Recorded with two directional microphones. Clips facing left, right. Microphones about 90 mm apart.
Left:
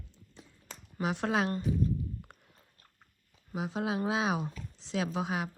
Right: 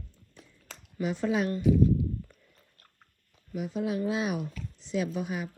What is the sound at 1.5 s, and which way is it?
Speech, 40° left (ahead or behind).